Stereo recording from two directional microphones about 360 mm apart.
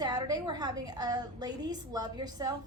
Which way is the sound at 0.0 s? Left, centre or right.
Centre.